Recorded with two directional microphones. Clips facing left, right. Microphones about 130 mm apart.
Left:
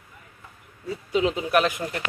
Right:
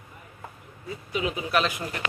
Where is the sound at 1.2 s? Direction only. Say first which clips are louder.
Left 6 dB; 75° left (ahead or behind).